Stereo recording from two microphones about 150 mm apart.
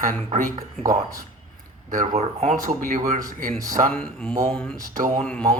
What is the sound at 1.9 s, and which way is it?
Speech, 55° right (ahead or behind).